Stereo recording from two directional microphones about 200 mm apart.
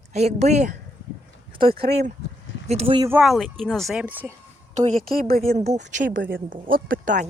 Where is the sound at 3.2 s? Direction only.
Centre (ahead or behind).